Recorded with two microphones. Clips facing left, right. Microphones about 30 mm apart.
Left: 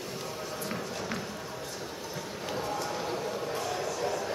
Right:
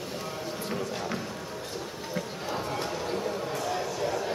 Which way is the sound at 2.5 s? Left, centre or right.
Right.